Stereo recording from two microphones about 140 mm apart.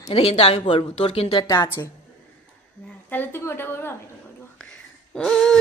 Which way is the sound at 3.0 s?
15° left (ahead or behind).